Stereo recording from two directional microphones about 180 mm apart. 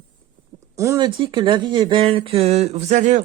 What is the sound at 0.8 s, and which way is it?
Speech, 20° right (ahead or behind).